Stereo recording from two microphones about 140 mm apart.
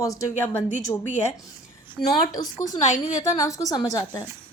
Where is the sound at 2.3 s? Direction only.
30° left (ahead or behind).